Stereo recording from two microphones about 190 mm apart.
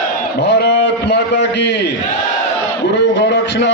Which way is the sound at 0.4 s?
60° left (ahead or behind).